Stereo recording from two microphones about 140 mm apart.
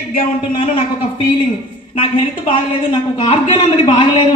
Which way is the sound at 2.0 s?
40° left (ahead or behind).